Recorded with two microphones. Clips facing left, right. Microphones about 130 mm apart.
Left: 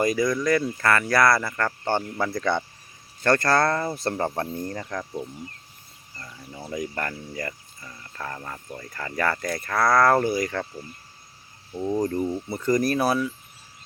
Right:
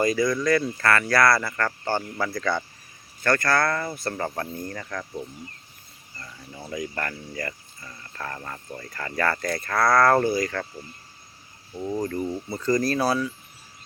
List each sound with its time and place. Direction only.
0.0 s speech: 20° left (ahead or behind)
11.7 s speech: 10° left (ahead or behind)